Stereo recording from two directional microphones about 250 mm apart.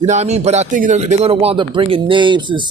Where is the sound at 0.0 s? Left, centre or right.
Right.